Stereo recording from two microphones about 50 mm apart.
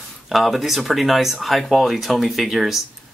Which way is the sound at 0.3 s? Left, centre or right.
Centre.